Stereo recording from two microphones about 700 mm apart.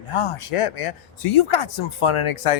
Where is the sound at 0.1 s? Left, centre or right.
Left.